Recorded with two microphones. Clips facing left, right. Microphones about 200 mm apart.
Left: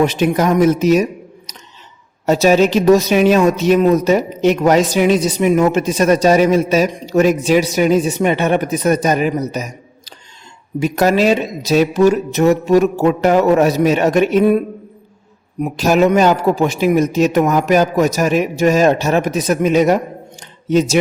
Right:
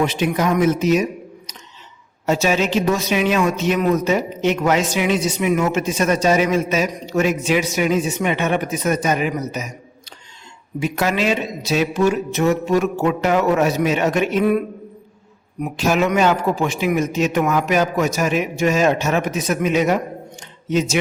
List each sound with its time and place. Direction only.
0.0 s speech: 40° left (ahead or behind)
2.2 s speech: 40° left (ahead or behind)
10.8 s speech: 40° left (ahead or behind)
15.8 s speech: 40° left (ahead or behind)